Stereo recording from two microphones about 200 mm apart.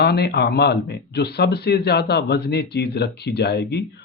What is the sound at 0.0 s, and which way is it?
A man's voice, 55° left (ahead or behind).